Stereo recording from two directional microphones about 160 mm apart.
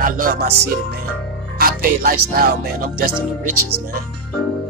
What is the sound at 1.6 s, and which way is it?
Speech, 60° right (ahead or behind).